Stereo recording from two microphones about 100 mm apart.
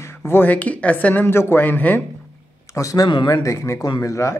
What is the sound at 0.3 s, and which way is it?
Speech, 15° left (ahead or behind).